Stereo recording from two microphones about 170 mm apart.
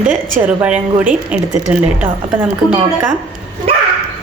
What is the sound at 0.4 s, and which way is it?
A woman's voice, 10° right (ahead or behind).